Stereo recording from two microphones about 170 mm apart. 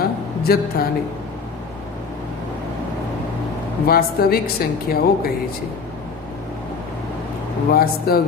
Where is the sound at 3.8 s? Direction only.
60° left (ahead or behind).